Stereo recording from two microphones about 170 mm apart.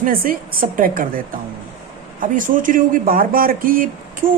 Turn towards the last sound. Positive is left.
turn(degrees=-55)  # may be behind; listen again after turning